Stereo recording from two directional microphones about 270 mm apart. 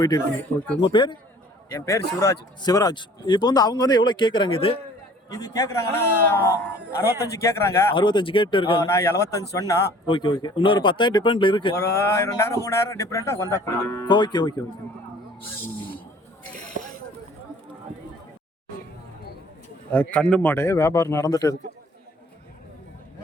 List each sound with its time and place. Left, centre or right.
0.0 s speech: centre
15.5 s a sound: centre
19.9 s speech: centre